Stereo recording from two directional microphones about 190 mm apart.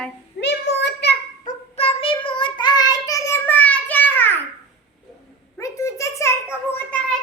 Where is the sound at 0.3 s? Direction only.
65° left (ahead or behind).